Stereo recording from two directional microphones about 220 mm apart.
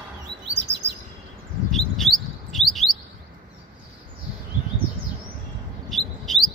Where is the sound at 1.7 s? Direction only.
Centre (ahead or behind).